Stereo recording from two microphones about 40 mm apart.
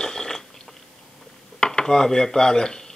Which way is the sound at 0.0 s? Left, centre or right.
Centre.